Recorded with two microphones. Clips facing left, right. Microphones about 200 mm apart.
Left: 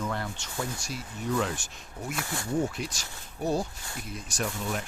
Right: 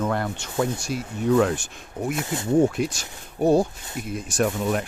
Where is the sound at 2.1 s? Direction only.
20° right (ahead or behind).